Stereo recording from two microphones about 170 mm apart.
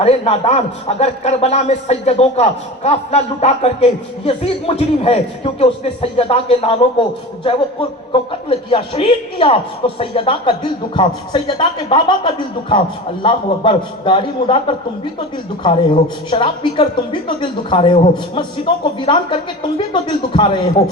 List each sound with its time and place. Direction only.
0.0 s a man's voice: 35° left (ahead or behind)
16.3 s a man's voice: 30° left (ahead or behind)